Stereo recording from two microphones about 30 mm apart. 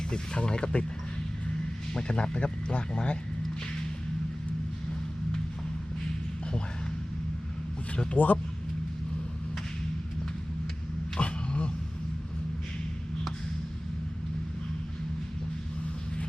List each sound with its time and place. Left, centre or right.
0.1 s speech: left
1.9 s speech: left
8.1 s speech: left
11.2 s vehicle: left